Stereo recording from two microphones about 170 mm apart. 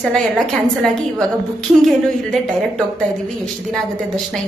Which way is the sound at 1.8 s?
Centre (ahead or behind).